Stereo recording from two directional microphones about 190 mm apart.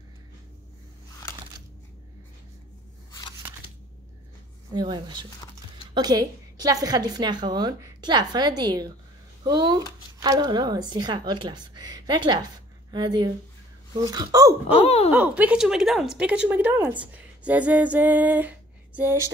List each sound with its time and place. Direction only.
3.1 s scissors: 20° left (ahead or behind)
4.7 s speech: 20° right (ahead or behind)
5.4 s music: 20° left (ahead or behind)
5.9 s speech: 20° right (ahead or behind)
14.8 s speech: 30° left (ahead or behind)
15.0 s a woman's voice: 10° right (ahead or behind)